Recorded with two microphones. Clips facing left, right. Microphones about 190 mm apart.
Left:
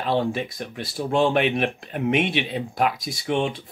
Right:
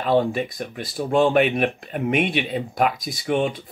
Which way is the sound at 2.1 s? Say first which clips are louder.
Right 2 dB; 50° right (ahead or behind).